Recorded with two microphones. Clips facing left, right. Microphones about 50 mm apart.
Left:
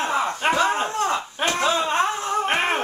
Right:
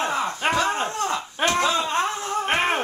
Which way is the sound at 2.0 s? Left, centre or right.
Centre.